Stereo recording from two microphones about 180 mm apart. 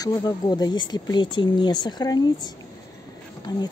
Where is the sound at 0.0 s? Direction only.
20° left (ahead or behind).